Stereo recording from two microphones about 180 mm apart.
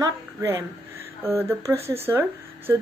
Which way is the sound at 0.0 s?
20° right (ahead or behind).